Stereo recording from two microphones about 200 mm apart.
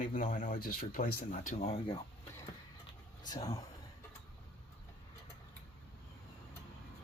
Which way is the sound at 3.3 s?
20° left (ahead or behind).